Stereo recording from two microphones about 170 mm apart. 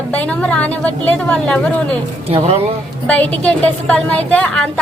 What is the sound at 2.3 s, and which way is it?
Speech, 35° right (ahead or behind).